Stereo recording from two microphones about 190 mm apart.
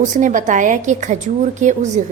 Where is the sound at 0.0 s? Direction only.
40° right (ahead or behind).